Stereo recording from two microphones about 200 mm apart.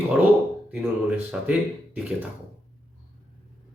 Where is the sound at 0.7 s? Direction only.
5° right (ahead or behind).